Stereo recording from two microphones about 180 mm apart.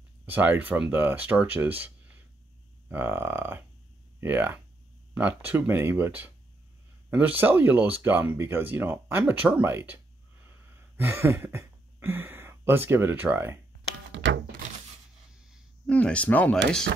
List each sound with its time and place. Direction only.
0.2 s speech: 10° right (ahead or behind)
2.9 s speech: 10° right (ahead or behind)
11.0 s speech: 10° right (ahead or behind)
14.1 s thunk: 90° right
15.9 s speech: 5° left (ahead or behind)